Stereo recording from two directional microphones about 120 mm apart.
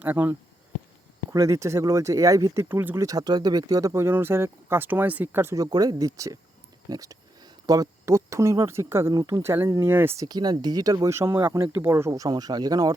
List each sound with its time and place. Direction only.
0.0 s speech: 15° right (ahead or behind)
5.7 s speech: 35° right (ahead or behind)
9.1 s speech: 30° right (ahead or behind)
10.2 s speech: 35° right (ahead or behind)